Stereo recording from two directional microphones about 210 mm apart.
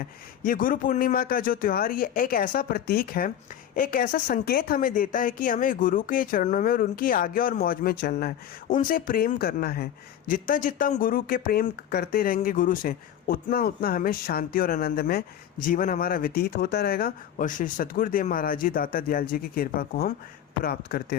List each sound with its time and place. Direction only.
0.0 s speech: 40° left (ahead or behind)